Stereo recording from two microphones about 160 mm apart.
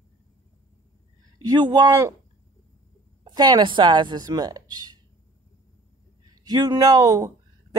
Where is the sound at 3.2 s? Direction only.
25° right (ahead or behind).